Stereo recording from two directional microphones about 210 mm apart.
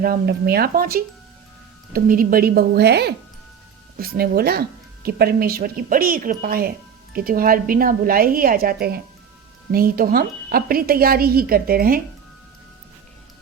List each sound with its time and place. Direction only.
0.0 s speech: 45° right (ahead or behind)